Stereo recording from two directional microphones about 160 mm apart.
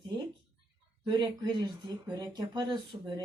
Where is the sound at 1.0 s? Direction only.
30° right (ahead or behind).